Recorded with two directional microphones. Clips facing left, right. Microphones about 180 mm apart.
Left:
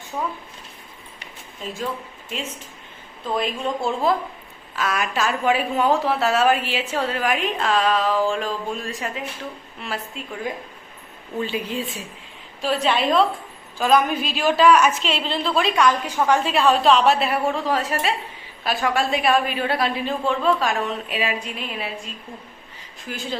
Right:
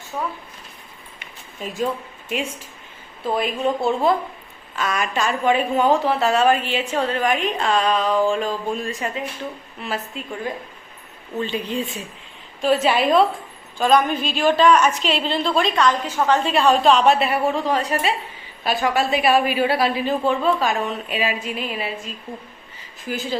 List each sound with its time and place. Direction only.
1.6 s a woman's voice: 20° right (ahead or behind); by 10.2 s centre (ahead or behind)
11.3 s a woman's voice: 5° left (ahead or behind)